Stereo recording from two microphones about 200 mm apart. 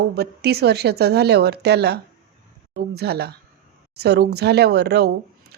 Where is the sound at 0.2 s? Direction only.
55° right (ahead or behind).